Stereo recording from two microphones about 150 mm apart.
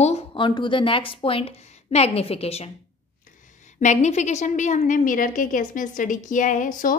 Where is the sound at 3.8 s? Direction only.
50° left (ahead or behind).